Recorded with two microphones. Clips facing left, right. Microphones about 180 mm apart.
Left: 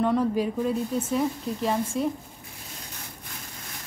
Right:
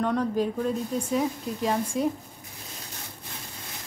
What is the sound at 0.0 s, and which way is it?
Speech, 5° left (ahead or behind).